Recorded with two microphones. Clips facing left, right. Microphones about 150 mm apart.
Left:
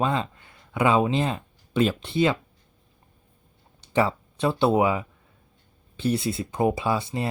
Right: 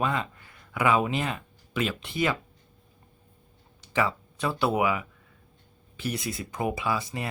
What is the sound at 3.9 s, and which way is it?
Speech, 30° left (ahead or behind).